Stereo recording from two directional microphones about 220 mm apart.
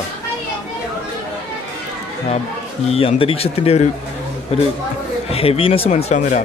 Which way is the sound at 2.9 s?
25° left (ahead or behind).